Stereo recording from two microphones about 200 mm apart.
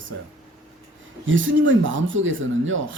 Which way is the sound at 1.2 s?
75° right (ahead or behind).